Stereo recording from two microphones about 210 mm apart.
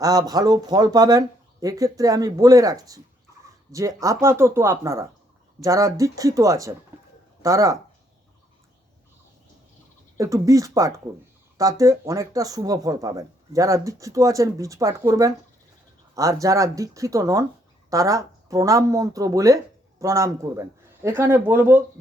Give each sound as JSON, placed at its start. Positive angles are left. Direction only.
{"t": 0.0, "sound": "speech", "side_deg": -15}
{"t": 10.2, "sound": "speech", "side_deg": -15}